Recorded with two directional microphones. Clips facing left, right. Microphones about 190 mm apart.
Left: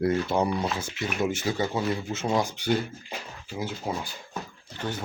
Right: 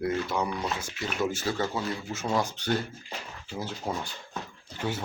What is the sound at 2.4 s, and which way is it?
Speech, 10° left (ahead or behind).